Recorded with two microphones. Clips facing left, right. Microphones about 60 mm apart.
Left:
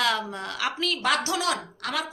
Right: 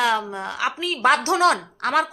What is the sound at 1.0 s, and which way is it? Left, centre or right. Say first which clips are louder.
A woman's voice: right 9 dB; right.